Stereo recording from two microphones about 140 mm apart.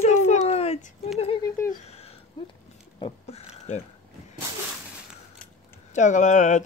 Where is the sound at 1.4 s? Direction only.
20° left (ahead or behind).